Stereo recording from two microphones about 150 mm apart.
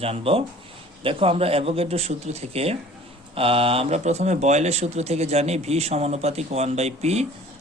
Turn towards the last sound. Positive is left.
turn(degrees=-45)  # may be behind; listen again after turning